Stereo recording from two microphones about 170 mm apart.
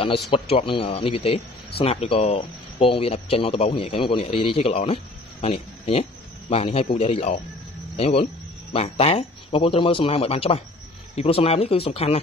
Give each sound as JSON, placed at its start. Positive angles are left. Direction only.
{"t": 0.3, "sound": "speech", "side_deg": 35}